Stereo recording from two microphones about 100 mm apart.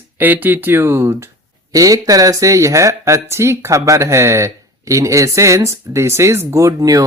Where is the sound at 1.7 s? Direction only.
35° right (ahead or behind).